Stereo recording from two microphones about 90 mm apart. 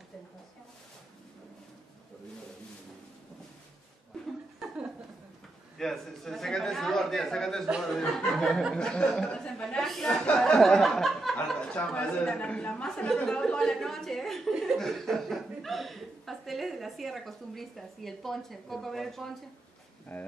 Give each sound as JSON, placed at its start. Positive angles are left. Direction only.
{"t": 4.6, "sound": "a sound", "side_deg": -10}
{"t": 5.8, "sound": "speech", "side_deg": 5}
{"t": 20.1, "sound": "speech", "side_deg": 15}